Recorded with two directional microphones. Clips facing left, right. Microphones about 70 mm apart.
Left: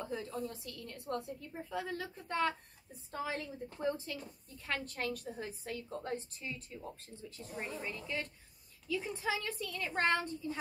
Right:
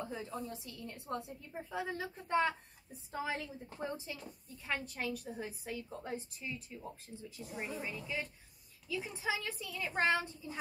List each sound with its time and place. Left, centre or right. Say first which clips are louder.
0.0 s a woman's voice: left 2 dB; centre